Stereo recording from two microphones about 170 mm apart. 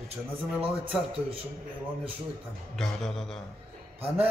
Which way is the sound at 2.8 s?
Centre (ahead or behind).